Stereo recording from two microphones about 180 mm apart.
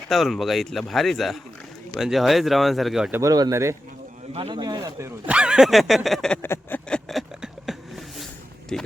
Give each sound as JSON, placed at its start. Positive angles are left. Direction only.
{"t": 0.1, "sound": "speech", "side_deg": 0}
{"t": 3.2, "sound": "speech", "side_deg": -20}
{"t": 4.4, "sound": "a sound", "side_deg": -30}
{"t": 8.7, "sound": "speech", "side_deg": 5}